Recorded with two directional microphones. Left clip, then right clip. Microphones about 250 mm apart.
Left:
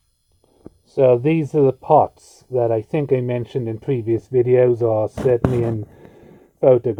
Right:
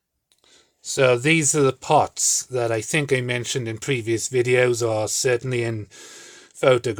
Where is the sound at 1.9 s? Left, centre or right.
Centre.